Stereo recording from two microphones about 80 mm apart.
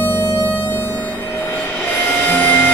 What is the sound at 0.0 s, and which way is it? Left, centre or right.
Music, left.